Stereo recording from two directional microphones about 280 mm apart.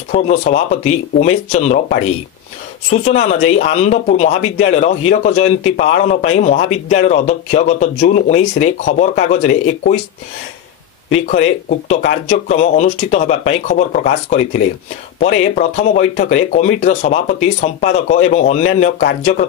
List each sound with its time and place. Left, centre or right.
0.1 s a man's voice: left
12.3 s a man's voice: left